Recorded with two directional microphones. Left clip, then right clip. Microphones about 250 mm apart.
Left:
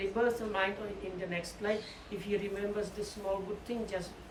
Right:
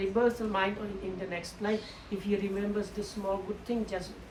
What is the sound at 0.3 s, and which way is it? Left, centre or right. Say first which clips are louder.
Speech: right 3 dB; centre.